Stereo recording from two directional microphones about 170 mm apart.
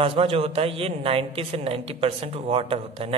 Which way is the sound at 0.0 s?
35° right (ahead or behind).